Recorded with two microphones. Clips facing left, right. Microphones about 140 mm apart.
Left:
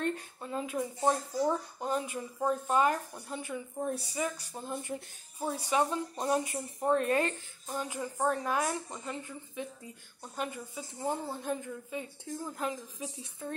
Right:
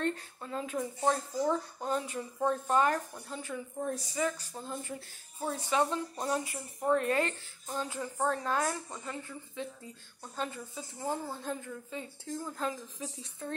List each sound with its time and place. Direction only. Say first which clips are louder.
0.0 s speech: even; 15° left (ahead or behind)